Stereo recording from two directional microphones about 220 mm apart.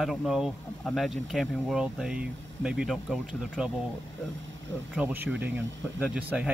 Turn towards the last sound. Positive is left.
turn(degrees=-5)  # may be behind; listen again after turning